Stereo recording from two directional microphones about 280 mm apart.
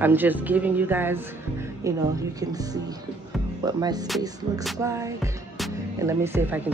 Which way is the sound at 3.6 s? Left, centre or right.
Centre.